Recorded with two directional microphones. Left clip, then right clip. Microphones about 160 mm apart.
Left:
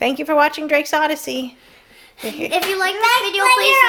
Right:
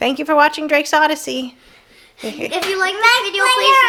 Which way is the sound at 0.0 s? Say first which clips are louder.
Right 2 dB; 15° right (ahead or behind).